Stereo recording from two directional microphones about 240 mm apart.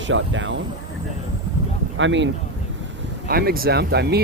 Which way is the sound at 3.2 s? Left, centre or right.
Right.